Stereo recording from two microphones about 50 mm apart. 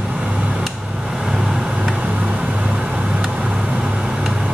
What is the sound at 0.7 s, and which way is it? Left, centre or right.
Vehicle, centre.